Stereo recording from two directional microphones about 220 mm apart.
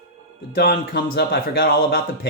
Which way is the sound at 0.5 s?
45° left (ahead or behind).